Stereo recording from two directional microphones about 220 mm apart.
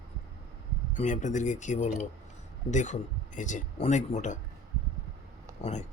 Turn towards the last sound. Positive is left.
turn(degrees=30)  # may be behind; listen again after turning